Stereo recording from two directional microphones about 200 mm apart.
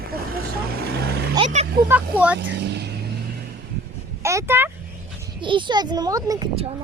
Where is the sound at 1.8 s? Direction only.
5° right (ahead or behind).